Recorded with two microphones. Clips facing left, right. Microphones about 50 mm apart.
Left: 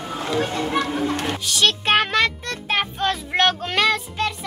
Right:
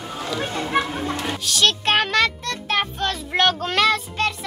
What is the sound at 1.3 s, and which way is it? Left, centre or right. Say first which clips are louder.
A child's voice: even; centre.